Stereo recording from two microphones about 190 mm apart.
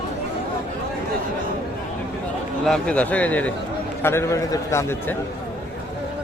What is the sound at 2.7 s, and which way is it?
A man's voice, 5° left (ahead or behind).